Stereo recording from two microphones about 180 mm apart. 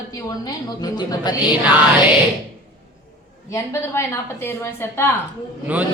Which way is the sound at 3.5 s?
15° left (ahead or behind).